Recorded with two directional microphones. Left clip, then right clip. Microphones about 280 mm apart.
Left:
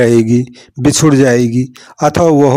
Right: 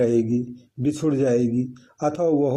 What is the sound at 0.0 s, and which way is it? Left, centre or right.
Speech, left.